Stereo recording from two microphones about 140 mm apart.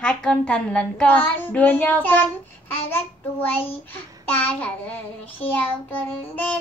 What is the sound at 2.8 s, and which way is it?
Child singing, 15° left (ahead or behind).